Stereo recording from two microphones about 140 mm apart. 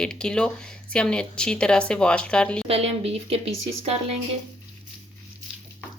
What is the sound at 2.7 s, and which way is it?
Speech, 45° right (ahead or behind).